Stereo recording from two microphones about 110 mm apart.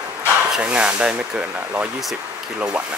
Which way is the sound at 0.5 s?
10° right (ahead or behind).